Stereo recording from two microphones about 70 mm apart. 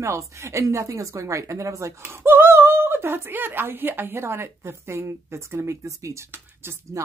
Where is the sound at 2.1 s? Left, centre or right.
Right.